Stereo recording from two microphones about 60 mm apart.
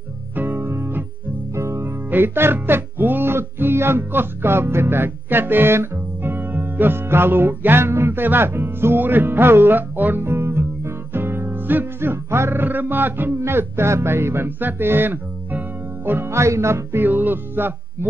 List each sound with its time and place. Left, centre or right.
0.4 s music: right
10.2 s music: right
17.0 s music: right